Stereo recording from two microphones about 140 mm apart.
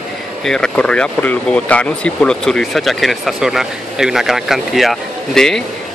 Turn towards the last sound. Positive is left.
turn(degrees=5)  # may be behind; listen again after turning